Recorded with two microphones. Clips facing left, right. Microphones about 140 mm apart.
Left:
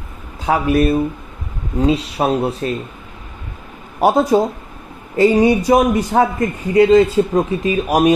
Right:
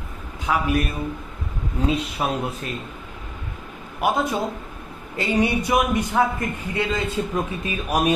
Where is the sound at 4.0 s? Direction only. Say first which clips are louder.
Left 9 dB; 40° left (ahead or behind).